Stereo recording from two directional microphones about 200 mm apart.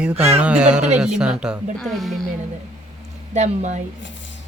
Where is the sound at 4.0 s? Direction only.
65° left (ahead or behind).